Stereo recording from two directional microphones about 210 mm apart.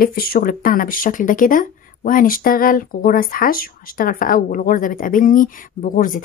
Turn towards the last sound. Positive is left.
turn(degrees=40)  # may be behind; listen again after turning